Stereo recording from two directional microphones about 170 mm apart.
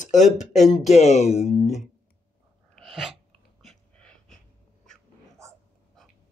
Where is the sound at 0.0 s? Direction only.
45° left (ahead or behind).